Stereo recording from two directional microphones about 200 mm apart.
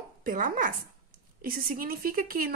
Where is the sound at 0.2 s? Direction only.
45° right (ahead or behind).